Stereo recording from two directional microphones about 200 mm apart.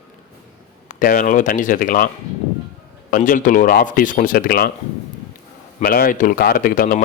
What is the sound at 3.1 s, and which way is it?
A man's voice, 40° left (ahead or behind).